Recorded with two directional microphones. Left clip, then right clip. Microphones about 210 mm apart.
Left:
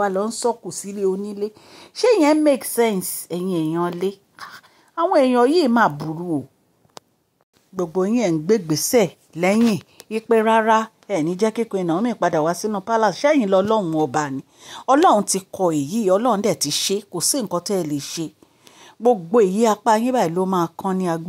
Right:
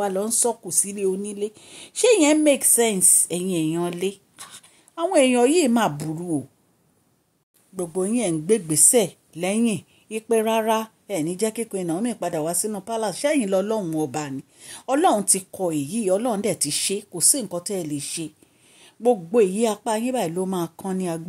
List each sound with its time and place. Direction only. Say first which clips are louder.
0.0 s a woman's voice: left 3 dB; 15° left (ahead or behind)
1.3 s speech: left 2 dB; 40° left (ahead or behind)
2.2 s a woman's voice: left 2 dB; 10° left (ahead or behind)
7.7 s a woman's voice: left 4 dB; 15° left (ahead or behind)
15.1 s speech: left 5 dB; centre (ahead or behind)
17.3 s a woman's voice: left 5 dB; 15° left (ahead or behind)